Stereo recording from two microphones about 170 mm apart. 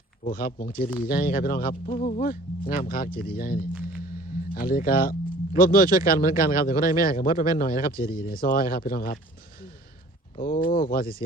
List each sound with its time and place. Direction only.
0.3 s speech: 60° left (ahead or behind)
10.8 s speech: 55° left (ahead or behind)